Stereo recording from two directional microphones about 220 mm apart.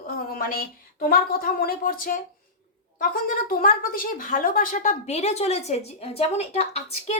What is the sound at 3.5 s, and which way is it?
Speech, 40° left (ahead or behind).